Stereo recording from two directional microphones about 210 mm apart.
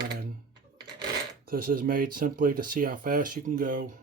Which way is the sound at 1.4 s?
45° right (ahead or behind).